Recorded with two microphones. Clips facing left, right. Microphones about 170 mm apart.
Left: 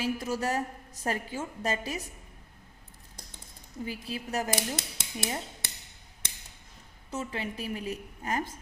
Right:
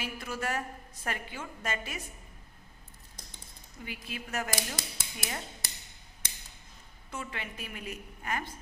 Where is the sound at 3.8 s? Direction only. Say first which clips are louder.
Left 6 dB; 35° left (ahead or behind).